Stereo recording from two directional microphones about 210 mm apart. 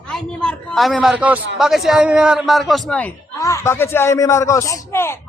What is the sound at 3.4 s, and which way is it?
A man's voice, 15° left (ahead or behind).